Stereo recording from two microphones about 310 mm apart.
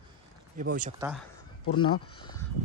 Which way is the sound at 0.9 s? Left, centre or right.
Centre.